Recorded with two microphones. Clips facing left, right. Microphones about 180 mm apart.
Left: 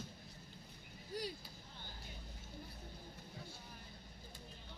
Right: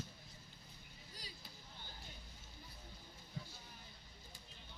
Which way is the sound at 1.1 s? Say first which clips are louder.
Left 16 dB; 60° left (ahead or behind).